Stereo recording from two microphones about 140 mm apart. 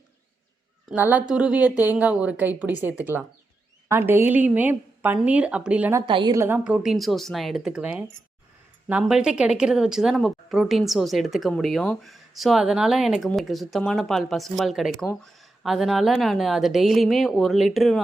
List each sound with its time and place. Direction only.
0.9 s a woman's voice: 15° right (ahead or behind)
6.1 s a woman's voice: 35° right (ahead or behind)
6.3 s a woman's voice: 20° right (ahead or behind)
6.7 s speech: 5° right (ahead or behind)